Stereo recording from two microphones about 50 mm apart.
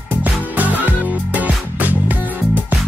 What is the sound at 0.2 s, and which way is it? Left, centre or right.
Music, right.